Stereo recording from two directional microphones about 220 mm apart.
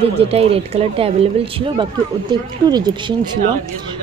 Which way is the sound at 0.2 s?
25° right (ahead or behind).